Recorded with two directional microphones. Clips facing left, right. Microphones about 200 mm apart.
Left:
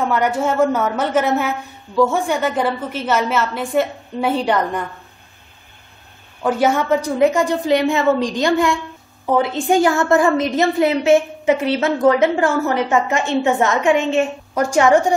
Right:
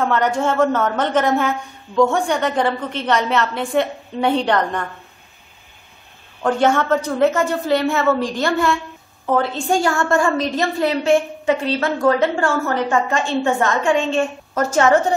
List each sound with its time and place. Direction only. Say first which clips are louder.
0.0 s a woman's voice: even; 10° left (ahead or behind)
6.4 s a woman's voice: even; 5° left (ahead or behind)